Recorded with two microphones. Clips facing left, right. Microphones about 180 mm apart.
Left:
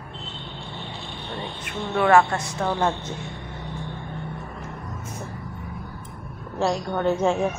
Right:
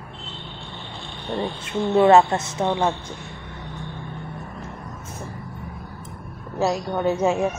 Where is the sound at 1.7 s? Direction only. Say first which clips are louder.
Right 5 dB; 25° right (ahead or behind).